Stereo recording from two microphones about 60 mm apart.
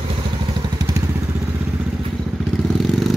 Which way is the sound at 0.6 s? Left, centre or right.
Right.